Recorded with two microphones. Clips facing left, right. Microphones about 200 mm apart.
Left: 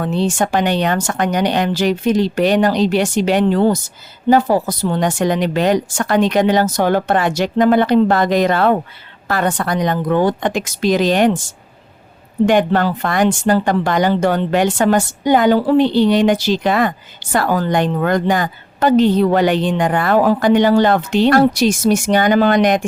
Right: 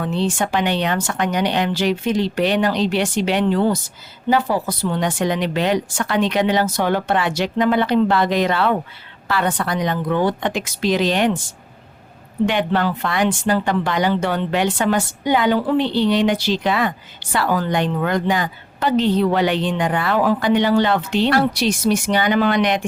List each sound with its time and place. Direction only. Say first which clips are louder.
0.0 s speech: left 3 dB; 45° left (ahead or behind)
12.5 s speech: left 6 dB; 45° left (ahead or behind)